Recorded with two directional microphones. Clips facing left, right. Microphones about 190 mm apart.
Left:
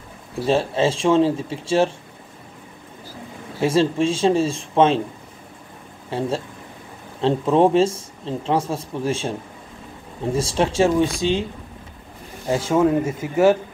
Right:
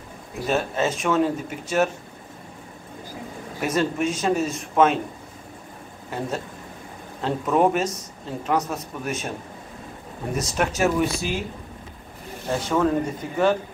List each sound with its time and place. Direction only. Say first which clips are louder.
0.5 s speech: left 4 dB; 30° left (ahead or behind)
3.6 s speech: left 5 dB; 30° left (ahead or behind)
6.0 s speech: left 5 dB; 30° left (ahead or behind)
10.3 s speech: left 5 dB; 30° left (ahead or behind)
12.4 s speech: left 4 dB; 20° left (ahead or behind)
13.0 s speech: left 5 dB; 5° left (ahead or behind)